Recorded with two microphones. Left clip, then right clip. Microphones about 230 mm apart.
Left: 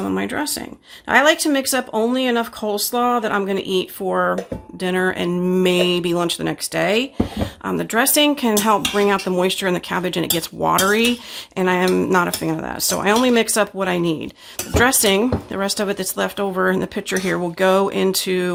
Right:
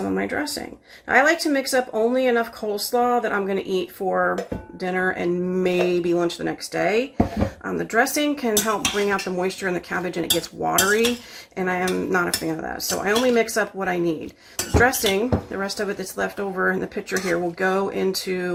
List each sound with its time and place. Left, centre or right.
0.1 s speech: left